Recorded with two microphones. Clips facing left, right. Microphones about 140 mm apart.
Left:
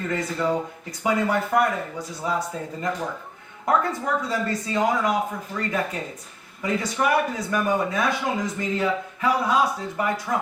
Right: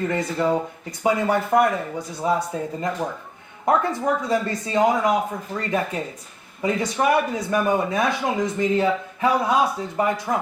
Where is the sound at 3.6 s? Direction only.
25° right (ahead or behind).